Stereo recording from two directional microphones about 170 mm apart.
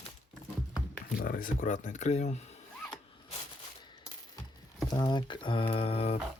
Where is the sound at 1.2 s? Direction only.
55° left (ahead or behind).